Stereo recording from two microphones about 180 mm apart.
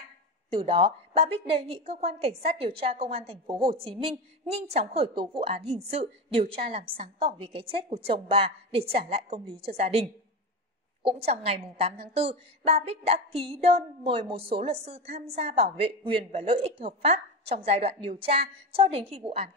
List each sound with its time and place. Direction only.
0.5 s a woman's voice: 30° right (ahead or behind)